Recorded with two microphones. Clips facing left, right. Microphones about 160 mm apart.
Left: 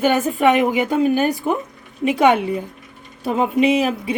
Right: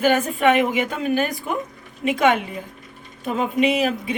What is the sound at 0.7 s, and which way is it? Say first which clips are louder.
Speech: left 5 dB; 40° left (ahead or behind).